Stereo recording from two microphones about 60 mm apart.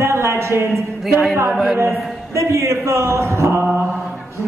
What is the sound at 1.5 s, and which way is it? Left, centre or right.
Speech, centre.